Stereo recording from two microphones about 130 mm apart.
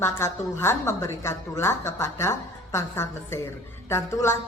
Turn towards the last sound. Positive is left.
turn(degrees=20)  # may be behind; listen again after turning